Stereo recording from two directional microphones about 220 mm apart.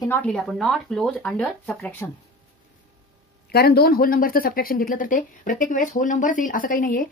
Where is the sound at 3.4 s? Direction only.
45° left (ahead or behind).